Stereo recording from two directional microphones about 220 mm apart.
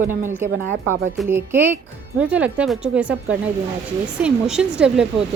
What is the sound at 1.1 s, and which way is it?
Speech, 10° right (ahead or behind).